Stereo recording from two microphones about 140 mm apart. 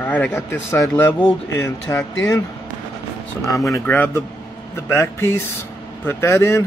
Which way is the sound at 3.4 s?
25° left (ahead or behind).